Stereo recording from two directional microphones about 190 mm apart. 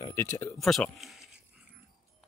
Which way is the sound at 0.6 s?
Centre (ahead or behind).